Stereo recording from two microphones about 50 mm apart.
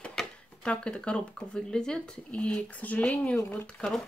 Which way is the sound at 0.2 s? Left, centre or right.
Centre.